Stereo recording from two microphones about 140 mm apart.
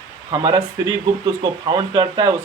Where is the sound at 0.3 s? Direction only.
30° right (ahead or behind).